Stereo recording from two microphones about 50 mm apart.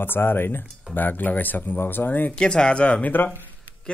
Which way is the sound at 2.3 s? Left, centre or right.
Centre.